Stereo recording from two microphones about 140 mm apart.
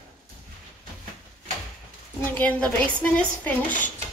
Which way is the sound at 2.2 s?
10° left (ahead or behind).